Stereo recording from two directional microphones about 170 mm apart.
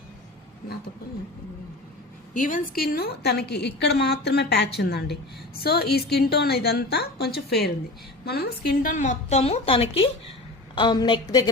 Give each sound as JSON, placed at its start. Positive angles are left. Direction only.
{"t": 2.3, "sound": "a woman's voice", "side_deg": 50}